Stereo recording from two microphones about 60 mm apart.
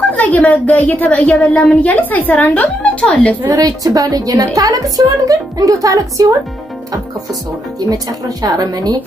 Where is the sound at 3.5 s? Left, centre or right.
Right.